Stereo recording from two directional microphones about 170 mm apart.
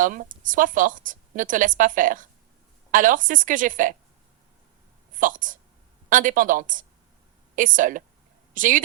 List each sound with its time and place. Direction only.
0.0 s a woman's voice: 50° right (ahead or behind)
5.1 s a woman's voice: 50° right (ahead or behind)